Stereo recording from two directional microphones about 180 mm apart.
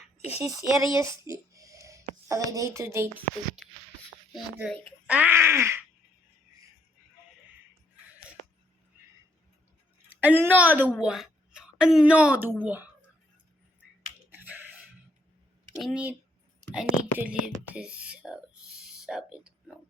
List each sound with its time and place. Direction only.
0.0 s a sound: 35° left (ahead or behind)
0.4 s speech: 20° right (ahead or behind)
4.4 s speech: centre (ahead or behind)
5.0 s a woman's voice: 10° right (ahead or behind)
10.2 s a woman's voice: 10° right (ahead or behind)
14.3 s a sound: 10° right (ahead or behind)
15.8 s speech: 5° right (ahead or behind)